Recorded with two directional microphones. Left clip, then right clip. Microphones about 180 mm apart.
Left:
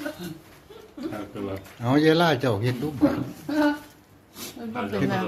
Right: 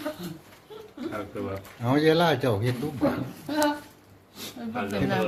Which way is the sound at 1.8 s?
5° left (ahead or behind).